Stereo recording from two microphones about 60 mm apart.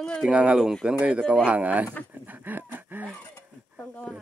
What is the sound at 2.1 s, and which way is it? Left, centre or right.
Dog, right.